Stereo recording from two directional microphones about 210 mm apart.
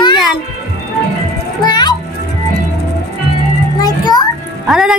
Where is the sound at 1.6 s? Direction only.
20° left (ahead or behind).